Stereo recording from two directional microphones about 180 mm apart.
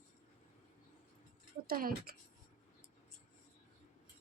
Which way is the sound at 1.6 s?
55° right (ahead or behind).